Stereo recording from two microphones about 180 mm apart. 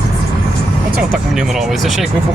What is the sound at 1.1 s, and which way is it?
Speech, centre (ahead or behind).